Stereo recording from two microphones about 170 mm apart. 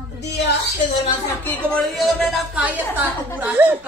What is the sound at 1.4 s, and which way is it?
A man's voice, 5° left (ahead or behind).